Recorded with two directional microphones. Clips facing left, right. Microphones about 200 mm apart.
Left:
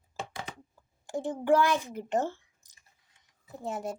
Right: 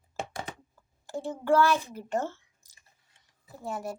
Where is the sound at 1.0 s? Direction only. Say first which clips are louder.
Left 2 dB; 15° left (ahead or behind).